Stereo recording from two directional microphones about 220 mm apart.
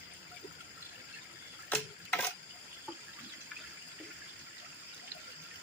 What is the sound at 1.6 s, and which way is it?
Mechanisms, 5° left (ahead or behind).